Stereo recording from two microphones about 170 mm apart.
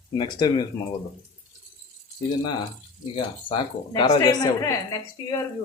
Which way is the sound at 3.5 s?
25° left (ahead or behind).